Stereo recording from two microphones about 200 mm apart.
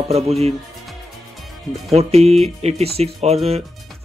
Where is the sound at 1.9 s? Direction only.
30° right (ahead or behind).